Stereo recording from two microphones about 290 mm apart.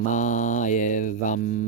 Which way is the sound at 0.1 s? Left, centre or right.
Left.